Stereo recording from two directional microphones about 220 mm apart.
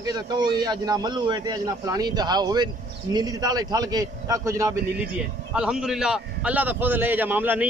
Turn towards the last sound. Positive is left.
turn(degrees=-10)  # may be behind; listen again after turning